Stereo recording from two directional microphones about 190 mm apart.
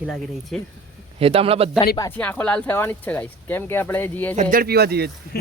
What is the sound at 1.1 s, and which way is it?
Speech, 30° right (ahead or behind).